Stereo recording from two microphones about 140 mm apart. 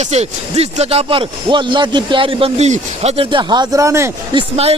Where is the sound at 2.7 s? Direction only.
50° right (ahead or behind).